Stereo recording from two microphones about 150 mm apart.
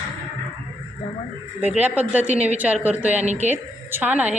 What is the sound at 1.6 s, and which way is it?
Speech, 10° right (ahead or behind).